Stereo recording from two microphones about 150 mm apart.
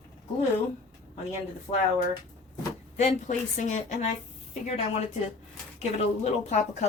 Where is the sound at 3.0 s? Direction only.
55° left (ahead or behind).